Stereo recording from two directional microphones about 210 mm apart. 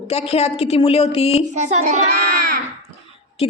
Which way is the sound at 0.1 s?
30° left (ahead or behind).